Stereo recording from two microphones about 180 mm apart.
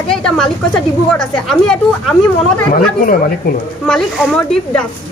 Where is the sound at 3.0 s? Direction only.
50° left (ahead or behind).